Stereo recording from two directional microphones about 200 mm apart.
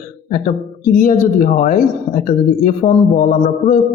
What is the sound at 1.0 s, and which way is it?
A man's voice, 40° left (ahead or behind).